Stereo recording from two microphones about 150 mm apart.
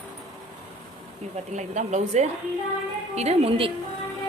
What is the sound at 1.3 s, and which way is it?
Speech, 50° right (ahead or behind).